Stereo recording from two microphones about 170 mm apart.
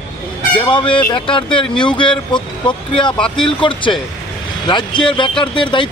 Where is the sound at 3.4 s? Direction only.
30° left (ahead or behind).